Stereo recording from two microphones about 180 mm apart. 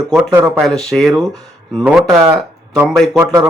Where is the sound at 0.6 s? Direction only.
Centre (ahead or behind).